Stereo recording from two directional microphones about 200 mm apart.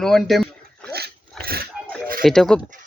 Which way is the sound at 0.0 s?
Centre (ahead or behind).